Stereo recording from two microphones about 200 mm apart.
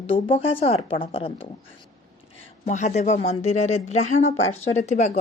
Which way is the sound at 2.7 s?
35° left (ahead or behind).